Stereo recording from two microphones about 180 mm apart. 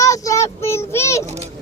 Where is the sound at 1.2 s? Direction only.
35° right (ahead or behind).